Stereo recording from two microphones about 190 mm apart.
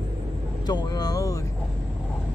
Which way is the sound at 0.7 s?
20° left (ahead or behind).